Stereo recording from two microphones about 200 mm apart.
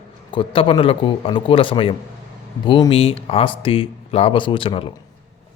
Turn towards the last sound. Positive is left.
turn(degrees=25)  # may be behind; listen again after turning